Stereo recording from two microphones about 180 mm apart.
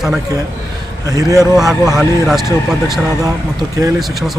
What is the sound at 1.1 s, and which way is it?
Speech, 20° right (ahead or behind).